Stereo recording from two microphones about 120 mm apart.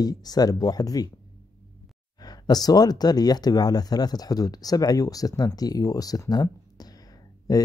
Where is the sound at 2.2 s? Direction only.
35° left (ahead or behind).